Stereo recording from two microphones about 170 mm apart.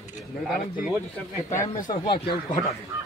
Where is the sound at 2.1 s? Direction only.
35° left (ahead or behind).